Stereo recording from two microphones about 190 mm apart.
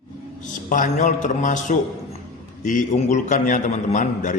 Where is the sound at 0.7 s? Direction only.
45° left (ahead or behind).